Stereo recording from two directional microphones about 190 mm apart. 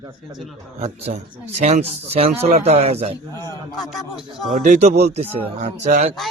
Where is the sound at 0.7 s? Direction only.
35° right (ahead or behind).